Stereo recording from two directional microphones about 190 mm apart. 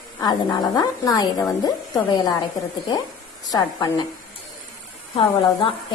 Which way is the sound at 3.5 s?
20° left (ahead or behind).